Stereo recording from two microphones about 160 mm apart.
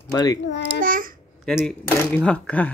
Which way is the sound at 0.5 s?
90° left.